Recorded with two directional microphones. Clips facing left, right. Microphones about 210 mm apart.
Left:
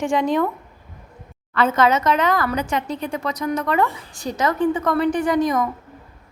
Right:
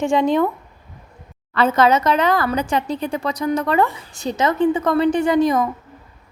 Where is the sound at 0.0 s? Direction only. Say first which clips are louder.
Right 3 dB; 25° right (ahead or behind).